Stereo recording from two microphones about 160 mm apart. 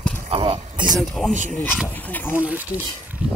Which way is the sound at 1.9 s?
10° left (ahead or behind).